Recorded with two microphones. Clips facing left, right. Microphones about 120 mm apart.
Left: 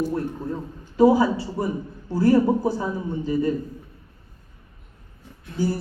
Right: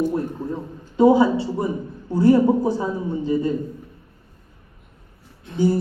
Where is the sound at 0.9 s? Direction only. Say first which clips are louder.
Right 2 dB; 25° right (ahead or behind).